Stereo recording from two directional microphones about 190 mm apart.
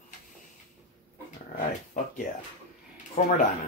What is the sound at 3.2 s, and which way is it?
Speech, 45° left (ahead or behind).